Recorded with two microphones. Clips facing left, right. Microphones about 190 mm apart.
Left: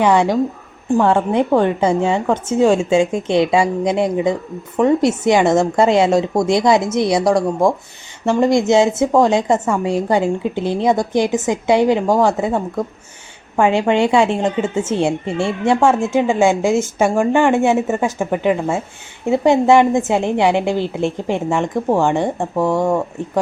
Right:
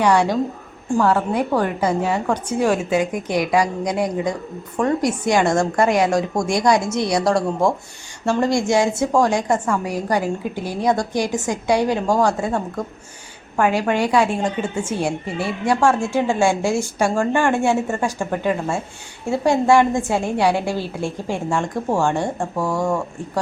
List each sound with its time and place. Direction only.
0.0 s a woman's voice: 20° left (ahead or behind)